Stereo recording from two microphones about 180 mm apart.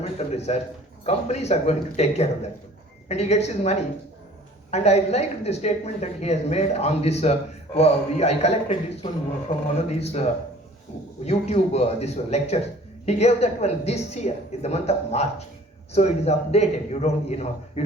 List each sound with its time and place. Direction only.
0.0 s a man's voice: 35° left (ahead or behind)
11.3 s a woman's voice: 35° left (ahead or behind)